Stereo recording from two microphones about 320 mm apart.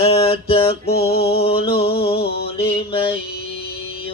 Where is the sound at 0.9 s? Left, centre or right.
Left.